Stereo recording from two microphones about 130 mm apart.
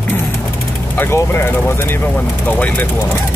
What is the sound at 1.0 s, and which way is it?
Speech, 20° left (ahead or behind).